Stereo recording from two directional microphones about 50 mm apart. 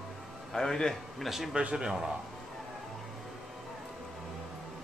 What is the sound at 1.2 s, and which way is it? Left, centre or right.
Speech, centre.